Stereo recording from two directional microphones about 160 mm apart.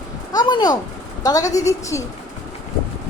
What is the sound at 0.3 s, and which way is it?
A woman's voice, 25° left (ahead or behind).